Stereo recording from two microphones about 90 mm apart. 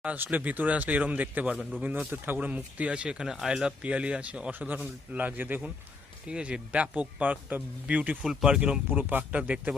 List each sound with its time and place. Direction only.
0.0 s speech: 15° right (ahead or behind)
6.2 s speech: 10° right (ahead or behind)
8.2 s speech: 5° right (ahead or behind)